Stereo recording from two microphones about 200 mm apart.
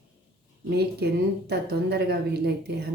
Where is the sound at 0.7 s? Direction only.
55° right (ahead or behind).